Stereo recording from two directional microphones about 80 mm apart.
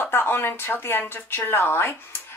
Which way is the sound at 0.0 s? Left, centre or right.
Left.